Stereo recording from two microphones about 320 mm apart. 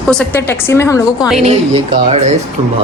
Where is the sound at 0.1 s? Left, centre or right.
Centre.